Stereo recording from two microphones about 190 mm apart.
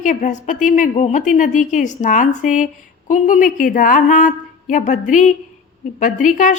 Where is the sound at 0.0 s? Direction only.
40° left (ahead or behind).